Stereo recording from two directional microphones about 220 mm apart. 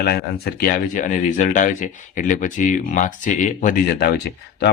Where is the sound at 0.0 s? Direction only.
45° left (ahead or behind).